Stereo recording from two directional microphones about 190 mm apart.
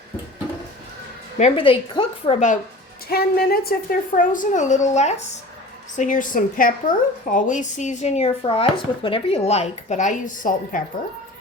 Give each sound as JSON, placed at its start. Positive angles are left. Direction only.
{"t": 1.4, "sound": "speech", "side_deg": 30}
{"t": 3.1, "sound": "a woman's voice", "side_deg": 55}